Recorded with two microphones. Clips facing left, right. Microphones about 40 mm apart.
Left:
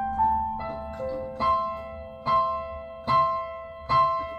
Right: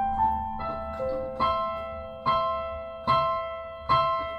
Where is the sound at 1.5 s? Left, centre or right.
Right.